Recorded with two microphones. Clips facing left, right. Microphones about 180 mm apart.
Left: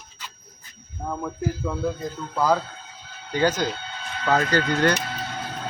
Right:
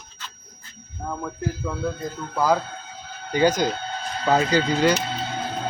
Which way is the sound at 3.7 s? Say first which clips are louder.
Right 5 dB; 40° right (ahead or behind).